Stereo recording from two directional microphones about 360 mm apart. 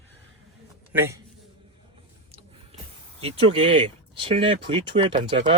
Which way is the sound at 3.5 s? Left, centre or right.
Centre.